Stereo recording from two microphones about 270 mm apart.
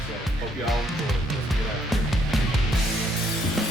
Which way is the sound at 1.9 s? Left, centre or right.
Centre.